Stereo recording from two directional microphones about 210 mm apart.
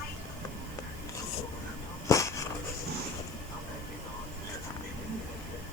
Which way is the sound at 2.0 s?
15° left (ahead or behind).